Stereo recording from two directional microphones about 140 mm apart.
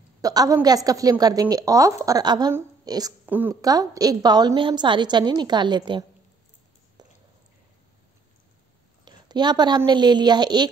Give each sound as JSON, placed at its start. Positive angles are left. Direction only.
{"t": 0.2, "sound": "a woman's voice", "side_deg": -25}
{"t": 3.3, "sound": "a woman's voice", "side_deg": -15}
{"t": 3.6, "sound": "a woman's voice", "side_deg": -25}
{"t": 7.0, "sound": "a sound", "side_deg": -30}
{"t": 9.0, "sound": "a sound", "side_deg": -30}
{"t": 9.8, "sound": "a woman's voice", "side_deg": -30}